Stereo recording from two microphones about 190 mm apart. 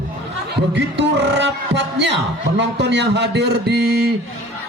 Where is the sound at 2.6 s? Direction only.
65° right (ahead or behind).